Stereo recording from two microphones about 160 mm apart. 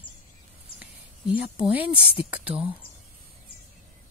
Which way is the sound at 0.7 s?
5° right (ahead or behind).